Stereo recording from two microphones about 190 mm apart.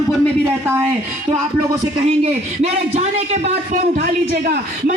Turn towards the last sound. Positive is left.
turn(degrees=-45)  # may be behind; listen again after turning